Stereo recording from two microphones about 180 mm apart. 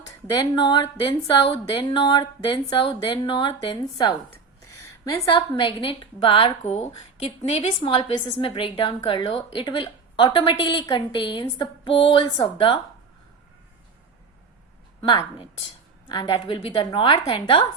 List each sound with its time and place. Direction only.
0.3 s a woman's voice: 25° left (ahead or behind)
5.5 s a woman's voice: 25° left (ahead or behind)
15.0 s a woman's voice: 30° left (ahead or behind)